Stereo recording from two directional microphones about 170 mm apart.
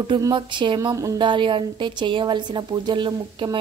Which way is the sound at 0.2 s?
25° right (ahead or behind).